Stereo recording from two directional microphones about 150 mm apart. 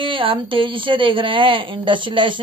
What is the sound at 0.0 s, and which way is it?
Speech, 35° right (ahead or behind).